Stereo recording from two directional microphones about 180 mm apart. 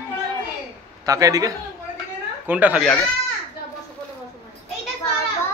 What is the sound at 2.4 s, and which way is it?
Speech, 10° right (ahead or behind).